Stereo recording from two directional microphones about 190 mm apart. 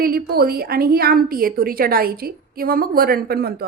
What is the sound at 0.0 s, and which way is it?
A woman's voice, 55° right (ahead or behind).